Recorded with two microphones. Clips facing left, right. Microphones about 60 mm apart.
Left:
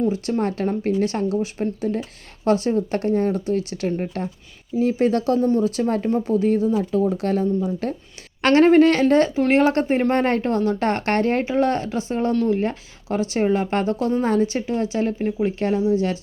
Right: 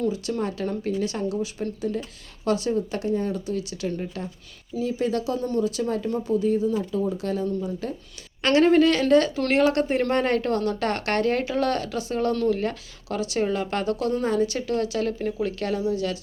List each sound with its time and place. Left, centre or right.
0.1 s speech: left
5.4 s speech: left
5.6 s speech: left
12.3 s speech: centre
12.5 s speech: left